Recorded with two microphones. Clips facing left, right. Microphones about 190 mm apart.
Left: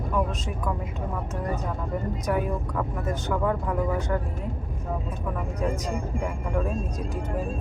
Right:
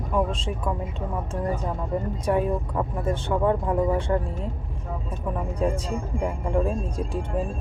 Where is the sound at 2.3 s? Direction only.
30° right (ahead or behind).